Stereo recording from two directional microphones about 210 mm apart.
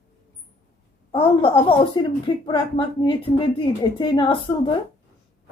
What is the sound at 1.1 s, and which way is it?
A woman's voice, 25° left (ahead or behind).